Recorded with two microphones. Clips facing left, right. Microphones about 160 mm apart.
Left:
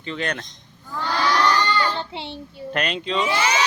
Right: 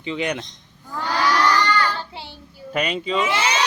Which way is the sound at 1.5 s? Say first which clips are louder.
Right 1 dB; 20° left (ahead or behind).